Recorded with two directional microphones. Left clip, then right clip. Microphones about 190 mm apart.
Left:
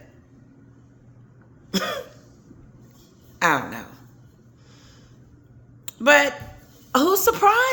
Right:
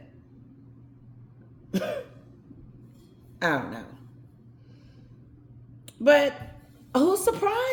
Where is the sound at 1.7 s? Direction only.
5° right (ahead or behind).